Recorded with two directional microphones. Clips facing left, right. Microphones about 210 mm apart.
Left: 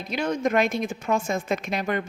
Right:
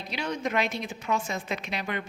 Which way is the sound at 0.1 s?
50° left (ahead or behind).